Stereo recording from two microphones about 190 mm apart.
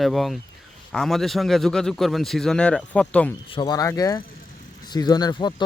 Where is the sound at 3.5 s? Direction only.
20° left (ahead or behind).